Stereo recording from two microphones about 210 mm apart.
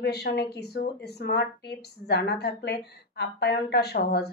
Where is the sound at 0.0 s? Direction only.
50° left (ahead or behind).